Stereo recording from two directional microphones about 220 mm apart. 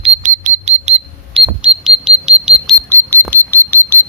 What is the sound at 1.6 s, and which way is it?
Alarm, centre (ahead or behind).